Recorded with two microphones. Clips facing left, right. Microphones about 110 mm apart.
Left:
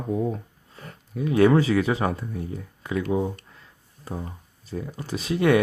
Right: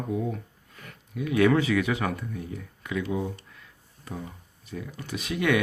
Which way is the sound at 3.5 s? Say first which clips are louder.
Left 1 dB; 30° left (ahead or behind).